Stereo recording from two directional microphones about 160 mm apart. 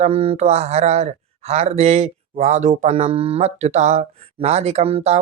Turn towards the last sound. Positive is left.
turn(degrees=-40)  # may be behind; listen again after turning